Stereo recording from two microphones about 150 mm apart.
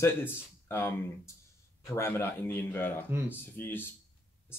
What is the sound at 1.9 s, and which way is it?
Speech, 15° left (ahead or behind).